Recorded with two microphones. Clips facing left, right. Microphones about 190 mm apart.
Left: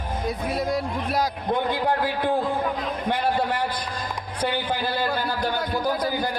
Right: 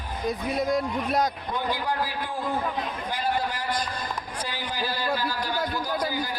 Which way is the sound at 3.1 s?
65° left (ahead or behind).